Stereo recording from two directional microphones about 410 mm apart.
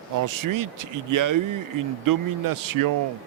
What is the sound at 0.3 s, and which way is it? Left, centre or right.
Speech, right.